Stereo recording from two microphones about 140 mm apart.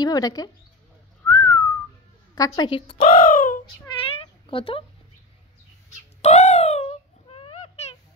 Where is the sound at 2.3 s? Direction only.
30° left (ahead or behind).